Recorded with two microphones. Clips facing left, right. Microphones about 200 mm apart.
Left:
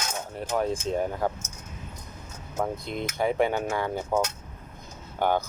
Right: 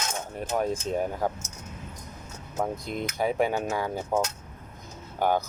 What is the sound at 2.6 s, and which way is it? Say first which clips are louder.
Speech: even; 15° right (ahead or behind).